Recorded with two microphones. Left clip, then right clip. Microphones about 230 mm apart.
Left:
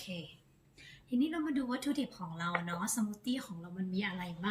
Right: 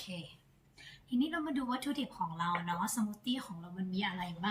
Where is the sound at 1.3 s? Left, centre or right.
Centre.